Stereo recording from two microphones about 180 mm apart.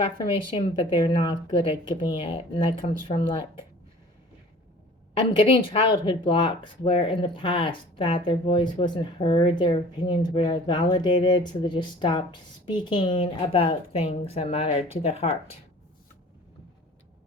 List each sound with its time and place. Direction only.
0.5 s speech: 30° left (ahead or behind)
5.1 s speech: 30° left (ahead or behind)